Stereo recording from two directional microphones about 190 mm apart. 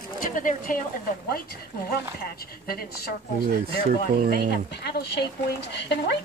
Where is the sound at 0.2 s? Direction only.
45° left (ahead or behind).